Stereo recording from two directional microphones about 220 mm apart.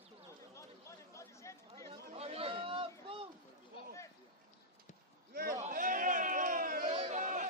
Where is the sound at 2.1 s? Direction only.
25° right (ahead or behind).